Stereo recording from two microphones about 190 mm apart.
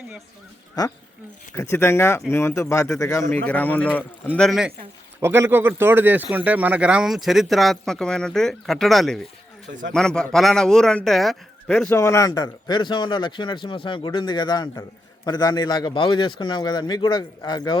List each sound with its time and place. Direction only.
1.5 s speech: 15° left (ahead or behind)
5.2 s speech: 15° right (ahead or behind); by 11.9 s 5° left (ahead or behind)
11.9 s speech: 15° left (ahead or behind)